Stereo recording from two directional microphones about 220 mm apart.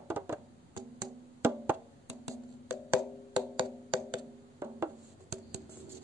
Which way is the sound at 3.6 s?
20° right (ahead or behind).